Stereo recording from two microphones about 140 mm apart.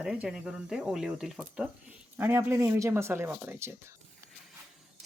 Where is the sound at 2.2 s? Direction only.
15° right (ahead or behind).